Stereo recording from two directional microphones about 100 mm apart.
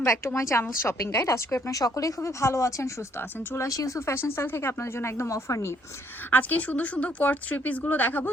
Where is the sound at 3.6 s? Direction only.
35° left (ahead or behind).